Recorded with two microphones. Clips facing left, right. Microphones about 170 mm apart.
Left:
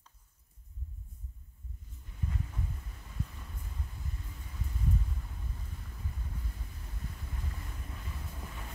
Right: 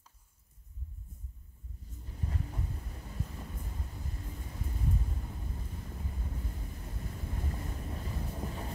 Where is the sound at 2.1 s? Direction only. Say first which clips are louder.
Right 1 dB; 35° right (ahead or behind).